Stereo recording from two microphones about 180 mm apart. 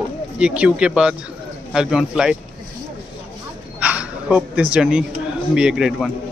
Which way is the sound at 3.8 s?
5° right (ahead or behind).